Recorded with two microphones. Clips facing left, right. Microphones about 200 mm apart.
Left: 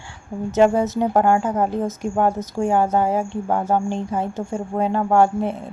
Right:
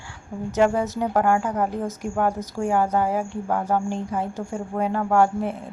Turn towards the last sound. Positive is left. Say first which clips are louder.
# left 3 dB
turn(degrees=25)  # may be behind; listen again after turning